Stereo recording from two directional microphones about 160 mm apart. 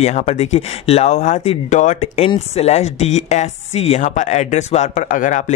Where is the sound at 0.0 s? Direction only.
45° left (ahead or behind).